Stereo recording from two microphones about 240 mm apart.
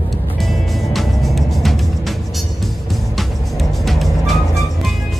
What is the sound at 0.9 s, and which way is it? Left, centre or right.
Music, centre.